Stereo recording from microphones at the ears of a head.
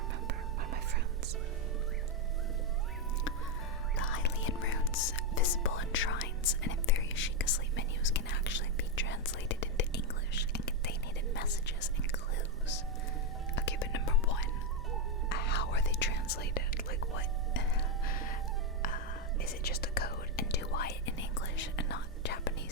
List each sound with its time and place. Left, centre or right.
3.9 s whispering: left
13.6 s whispering: left